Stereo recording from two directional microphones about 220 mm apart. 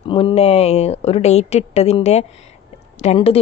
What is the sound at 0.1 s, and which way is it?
Speech, 25° left (ahead or behind).